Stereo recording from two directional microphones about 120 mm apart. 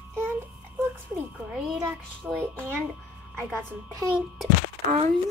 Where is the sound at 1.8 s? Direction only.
20° right (ahead or behind).